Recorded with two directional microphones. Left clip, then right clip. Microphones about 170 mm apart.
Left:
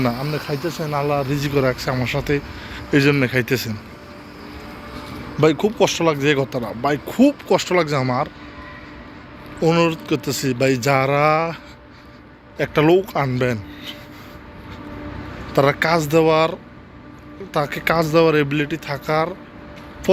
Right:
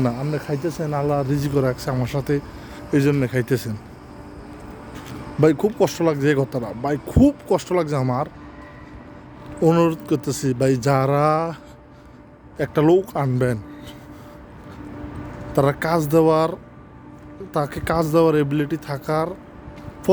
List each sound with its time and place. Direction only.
0.2 s speech: 35° right (ahead or behind)
2.6 s speech: 15° right (ahead or behind)
3.3 s speech: 30° right (ahead or behind)
5.4 s speech: 35° right (ahead or behind)
6.8 s speech: 25° right (ahead or behind)
9.6 s speech: 45° right (ahead or behind)
12.5 s speech: 30° right (ahead or behind)
15.5 s speech: 25° right (ahead or behind)